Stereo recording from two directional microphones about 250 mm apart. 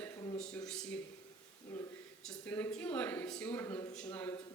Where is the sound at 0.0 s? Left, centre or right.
Centre.